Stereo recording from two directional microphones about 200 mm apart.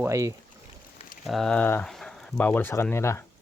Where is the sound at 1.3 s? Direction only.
Centre (ahead or behind).